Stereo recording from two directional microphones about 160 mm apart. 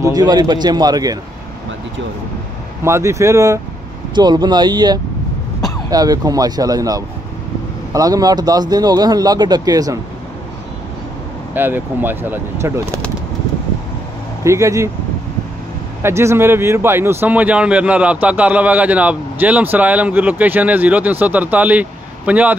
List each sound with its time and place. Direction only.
0.1 s speech: 25° right (ahead or behind)
2.8 s speech: 15° right (ahead or behind)
11.5 s a man's voice: 10° right (ahead or behind)
14.4 s speech: 20° right (ahead or behind)
16.0 s a man's voice: 15° right (ahead or behind)